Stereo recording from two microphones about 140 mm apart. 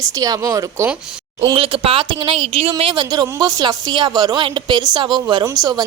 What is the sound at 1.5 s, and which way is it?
Speech, 40° right (ahead or behind).